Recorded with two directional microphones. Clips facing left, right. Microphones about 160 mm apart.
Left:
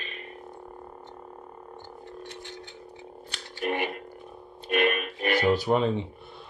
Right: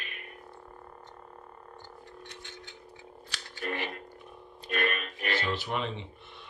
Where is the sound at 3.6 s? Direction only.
15° left (ahead or behind).